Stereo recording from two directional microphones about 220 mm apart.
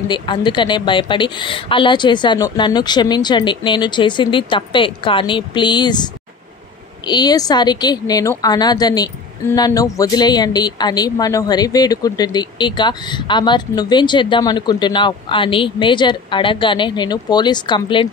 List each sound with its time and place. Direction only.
0.1 s a woman's voice: 20° left (ahead or behind)